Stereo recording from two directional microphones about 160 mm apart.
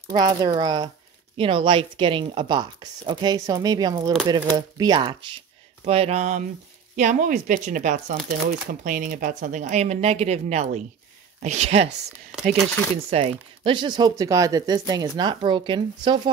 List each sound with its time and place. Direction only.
0.1 s speech: 25° right (ahead or behind)
5.9 s a sound: 40° right (ahead or behind)
7.0 s speech: 50° right (ahead or behind)
12.1 s speech: 5° right (ahead or behind)
12.9 s speech: 40° right (ahead or behind)